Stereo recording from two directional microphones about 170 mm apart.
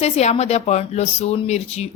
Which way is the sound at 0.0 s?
40° left (ahead or behind).